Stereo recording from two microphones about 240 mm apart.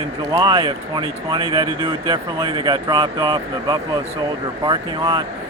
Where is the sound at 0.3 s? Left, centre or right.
Centre.